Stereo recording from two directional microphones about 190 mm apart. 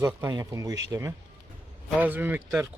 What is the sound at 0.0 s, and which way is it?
Speech, 20° right (ahead or behind).